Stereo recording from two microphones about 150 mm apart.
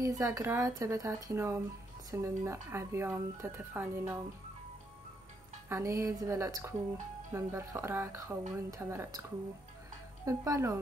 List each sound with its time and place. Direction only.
0.0 s speech: 20° right (ahead or behind)
5.7 s speech: 20° right (ahead or behind)
10.2 s speech: 20° right (ahead or behind)